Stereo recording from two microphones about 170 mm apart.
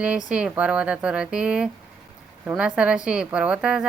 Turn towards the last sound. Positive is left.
turn(degrees=-5)  # may be behind; listen again after turning